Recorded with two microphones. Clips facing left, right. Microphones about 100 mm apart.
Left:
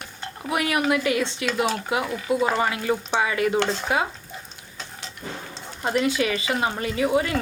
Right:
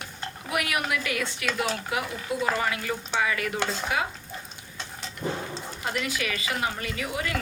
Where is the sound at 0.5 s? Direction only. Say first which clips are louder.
Left 6 dB; 30° left (ahead or behind).